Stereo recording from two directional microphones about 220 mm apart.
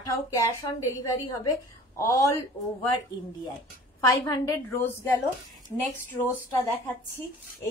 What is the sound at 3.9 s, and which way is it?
A woman's voice, 15° left (ahead or behind).